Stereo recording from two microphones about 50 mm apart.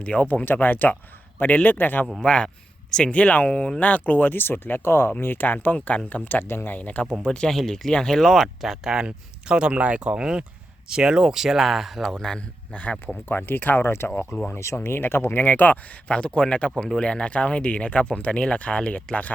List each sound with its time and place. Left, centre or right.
0.0 s speech: left
0.4 s speech: left
2.2 s speech: centre; by 4.8 s left
4.8 s speech: left
5.2 s speech: left
6.4 s speech: left
6.7 s speech: left
7.3 s speech: centre
12.7 s speech: left
13.2 s speech: left
16.0 s speech: left